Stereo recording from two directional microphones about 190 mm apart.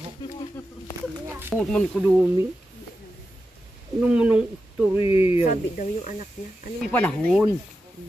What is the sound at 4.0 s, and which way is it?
Speech, 5° right (ahead or behind).